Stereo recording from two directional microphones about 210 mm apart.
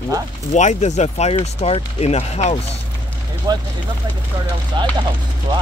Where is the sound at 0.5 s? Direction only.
35° left (ahead or behind).